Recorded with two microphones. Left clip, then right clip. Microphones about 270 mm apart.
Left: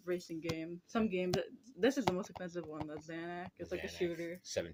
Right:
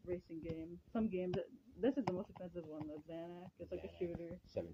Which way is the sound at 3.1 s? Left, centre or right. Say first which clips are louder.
Left 6 dB; left.